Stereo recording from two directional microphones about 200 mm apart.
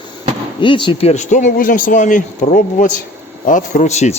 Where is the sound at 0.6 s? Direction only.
25° left (ahead or behind).